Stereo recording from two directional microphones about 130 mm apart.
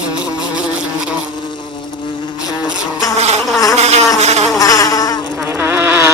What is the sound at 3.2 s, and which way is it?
Insect, 55° right (ahead or behind).